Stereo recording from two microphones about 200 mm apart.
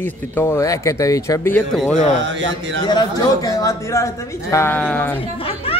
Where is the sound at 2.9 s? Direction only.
20° left (ahead or behind).